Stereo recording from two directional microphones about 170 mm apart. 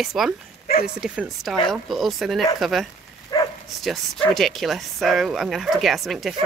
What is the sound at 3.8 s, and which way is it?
Speech, centre (ahead or behind).